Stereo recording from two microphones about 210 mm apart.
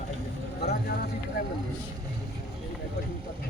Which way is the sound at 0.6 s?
50° left (ahead or behind).